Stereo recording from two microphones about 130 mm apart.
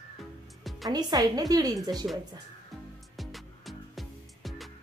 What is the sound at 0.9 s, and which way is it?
Speech, 30° right (ahead or behind).